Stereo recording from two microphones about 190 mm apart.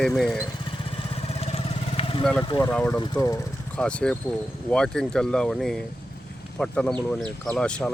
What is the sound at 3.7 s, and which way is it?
Speech, 5° left (ahead or behind).